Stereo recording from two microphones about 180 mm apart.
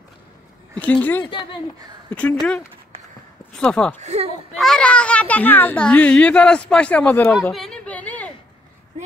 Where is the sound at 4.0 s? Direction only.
35° right (ahead or behind).